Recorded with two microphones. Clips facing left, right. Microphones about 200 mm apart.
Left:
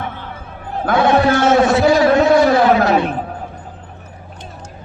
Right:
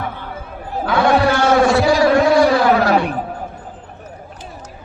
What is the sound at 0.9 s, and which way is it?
Speech, 20° left (ahead or behind).